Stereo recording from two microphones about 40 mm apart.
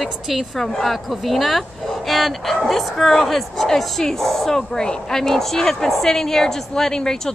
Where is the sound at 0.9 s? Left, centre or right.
Centre.